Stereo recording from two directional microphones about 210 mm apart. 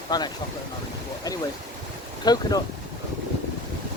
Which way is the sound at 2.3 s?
20° left (ahead or behind).